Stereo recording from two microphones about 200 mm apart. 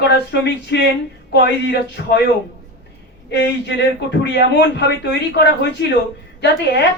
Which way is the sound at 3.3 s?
60° left (ahead or behind).